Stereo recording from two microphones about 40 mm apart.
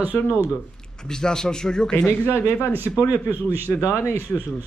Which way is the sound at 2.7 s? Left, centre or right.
Right.